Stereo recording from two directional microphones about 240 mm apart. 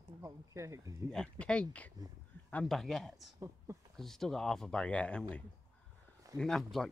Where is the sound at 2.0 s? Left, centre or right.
Centre.